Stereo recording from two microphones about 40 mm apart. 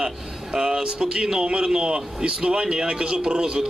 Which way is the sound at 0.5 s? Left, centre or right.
Centre.